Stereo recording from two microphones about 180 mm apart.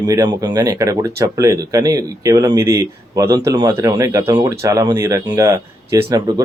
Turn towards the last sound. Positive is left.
turn(degrees=-20)  # may be behind; listen again after turning